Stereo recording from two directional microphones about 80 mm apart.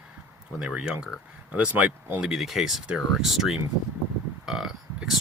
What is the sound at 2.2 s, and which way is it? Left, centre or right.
Speech, centre.